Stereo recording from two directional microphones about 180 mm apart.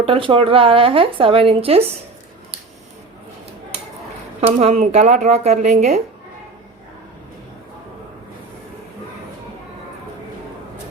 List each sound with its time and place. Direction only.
0.0 s speech: 30° right (ahead or behind)
4.4 s speech: 40° right (ahead or behind)